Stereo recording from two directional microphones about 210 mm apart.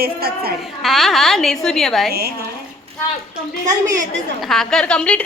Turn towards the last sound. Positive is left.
turn(degrees=5)  # may be behind; listen again after turning